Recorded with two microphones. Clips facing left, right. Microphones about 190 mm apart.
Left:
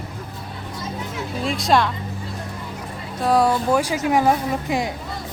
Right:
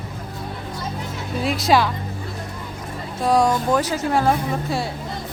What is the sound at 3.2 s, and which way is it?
Speech, centre (ahead or behind).